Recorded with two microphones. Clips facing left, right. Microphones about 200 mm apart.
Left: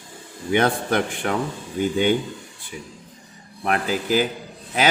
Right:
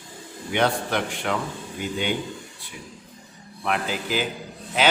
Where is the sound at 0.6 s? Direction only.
50° left (ahead or behind).